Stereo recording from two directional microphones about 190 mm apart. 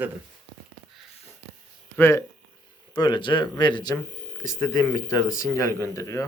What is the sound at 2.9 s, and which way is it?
Speech, 25° left (ahead or behind).